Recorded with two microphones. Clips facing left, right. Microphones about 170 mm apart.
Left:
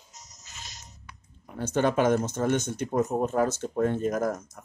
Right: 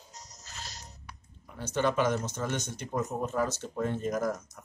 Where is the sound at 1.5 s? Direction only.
50° left (ahead or behind).